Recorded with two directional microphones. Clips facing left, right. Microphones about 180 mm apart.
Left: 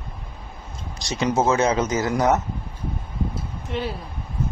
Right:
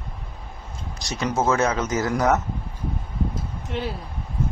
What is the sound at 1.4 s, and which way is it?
A man's voice, 20° left (ahead or behind).